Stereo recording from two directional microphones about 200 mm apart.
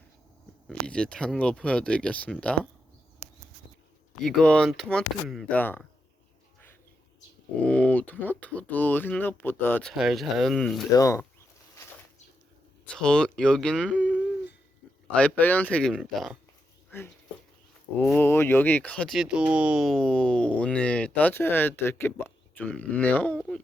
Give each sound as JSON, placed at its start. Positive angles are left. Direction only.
{"t": 0.7, "sound": "speech", "side_deg": 5}
{"t": 4.2, "sound": "speech", "side_deg": 5}
{"t": 7.6, "sound": "speech", "side_deg": 5}
{"t": 10.0, "sound": "speech", "side_deg": 0}
{"t": 10.9, "sound": "speech", "side_deg": 15}
{"t": 13.0, "sound": "speech", "side_deg": 5}
{"t": 18.0, "sound": "speech", "side_deg": 10}